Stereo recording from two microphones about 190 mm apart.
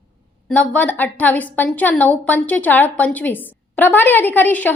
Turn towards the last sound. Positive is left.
turn(degrees=10)  # may be behind; listen again after turning